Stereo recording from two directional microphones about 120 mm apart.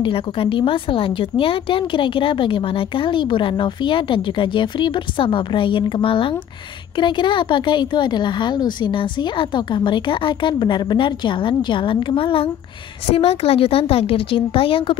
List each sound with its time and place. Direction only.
0.0 s a woman's voice: 45° left (ahead or behind)